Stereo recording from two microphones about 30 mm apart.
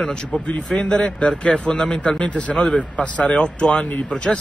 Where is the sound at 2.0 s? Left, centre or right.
Left.